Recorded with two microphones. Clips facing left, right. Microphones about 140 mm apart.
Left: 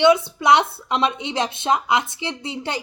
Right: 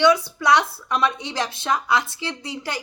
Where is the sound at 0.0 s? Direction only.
25° left (ahead or behind).